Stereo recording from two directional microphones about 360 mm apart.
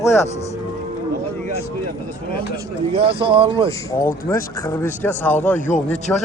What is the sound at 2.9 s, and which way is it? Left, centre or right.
Speech, centre.